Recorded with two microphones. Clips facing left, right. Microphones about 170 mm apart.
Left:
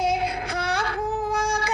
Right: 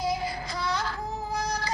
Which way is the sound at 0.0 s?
65° left (ahead or behind).